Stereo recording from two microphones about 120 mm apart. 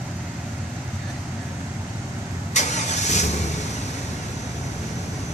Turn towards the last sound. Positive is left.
turn(degrees=75)  # may be behind; listen again after turning